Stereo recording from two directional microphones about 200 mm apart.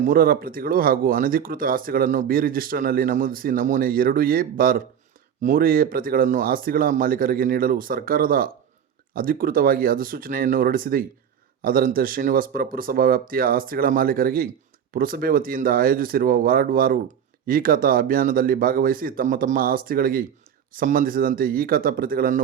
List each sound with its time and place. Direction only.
0.0 s speech: 45° right (ahead or behind)